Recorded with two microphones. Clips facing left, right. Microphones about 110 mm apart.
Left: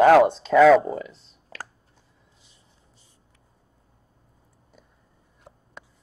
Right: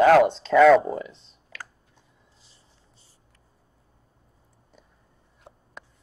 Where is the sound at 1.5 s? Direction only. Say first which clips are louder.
Left 3 dB; 35° left (ahead or behind).